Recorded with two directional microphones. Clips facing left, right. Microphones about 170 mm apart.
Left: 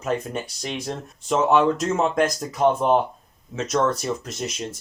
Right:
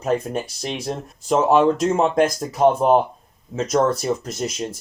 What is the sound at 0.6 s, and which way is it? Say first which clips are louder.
Speech: right 3 dB; 35° right (ahead or behind).